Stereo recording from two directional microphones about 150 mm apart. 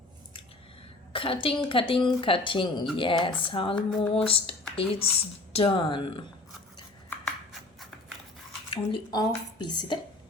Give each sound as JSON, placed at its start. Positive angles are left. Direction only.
{"t": 1.1, "sound": "a woman's voice", "side_deg": 35}
{"t": 8.7, "sound": "speech", "side_deg": 30}